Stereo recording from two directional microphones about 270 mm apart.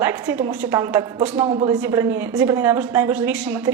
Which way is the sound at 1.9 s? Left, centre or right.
Centre.